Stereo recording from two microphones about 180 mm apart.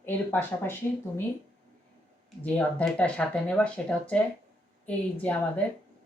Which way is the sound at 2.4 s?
5° left (ahead or behind).